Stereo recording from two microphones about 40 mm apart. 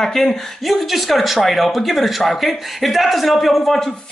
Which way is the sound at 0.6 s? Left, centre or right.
Centre.